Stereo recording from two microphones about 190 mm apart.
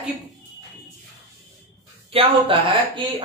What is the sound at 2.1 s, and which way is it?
Speech, 30° right (ahead or behind).